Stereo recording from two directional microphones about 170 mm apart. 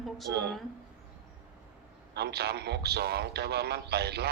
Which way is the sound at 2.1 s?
75° right (ahead or behind).